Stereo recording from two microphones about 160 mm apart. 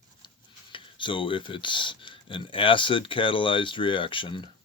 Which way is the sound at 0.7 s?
30° left (ahead or behind).